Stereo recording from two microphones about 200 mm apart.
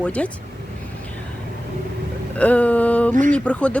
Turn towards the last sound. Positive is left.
turn(degrees=5)  # may be behind; listen again after turning